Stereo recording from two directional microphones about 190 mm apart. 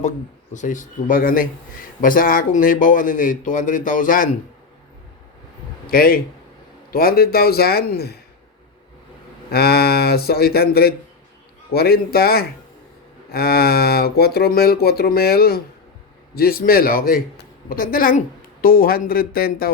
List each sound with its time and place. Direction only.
0.5 s a man's voice: 40° left (ahead or behind)
5.9 s a man's voice: 50° left (ahead or behind)
9.5 s a man's voice: 55° left (ahead or behind)